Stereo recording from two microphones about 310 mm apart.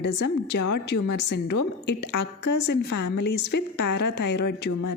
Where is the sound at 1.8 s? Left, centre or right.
Left.